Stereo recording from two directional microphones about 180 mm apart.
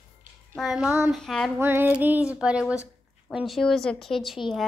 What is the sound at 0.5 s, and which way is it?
Speech, centre (ahead or behind).